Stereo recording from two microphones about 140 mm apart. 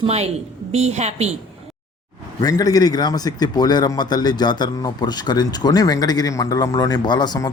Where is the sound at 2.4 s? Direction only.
25° left (ahead or behind).